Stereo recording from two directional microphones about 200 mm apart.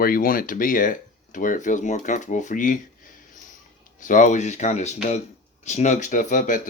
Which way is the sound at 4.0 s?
40° left (ahead or behind).